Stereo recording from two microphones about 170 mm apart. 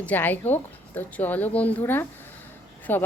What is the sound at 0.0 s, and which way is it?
Speech, 10° left (ahead or behind).